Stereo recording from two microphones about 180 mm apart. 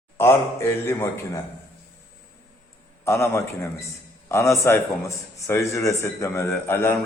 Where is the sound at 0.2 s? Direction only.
15° left (ahead or behind).